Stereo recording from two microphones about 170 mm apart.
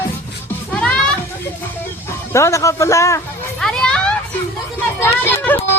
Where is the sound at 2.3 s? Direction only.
15° left (ahead or behind).